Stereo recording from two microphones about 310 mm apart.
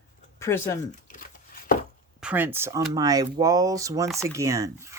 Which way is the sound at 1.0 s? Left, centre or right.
Left.